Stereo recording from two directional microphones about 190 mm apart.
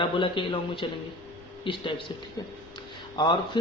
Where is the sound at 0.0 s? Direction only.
25° left (ahead or behind).